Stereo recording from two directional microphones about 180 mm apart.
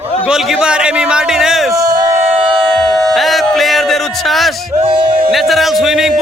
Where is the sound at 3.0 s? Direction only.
Centre (ahead or behind).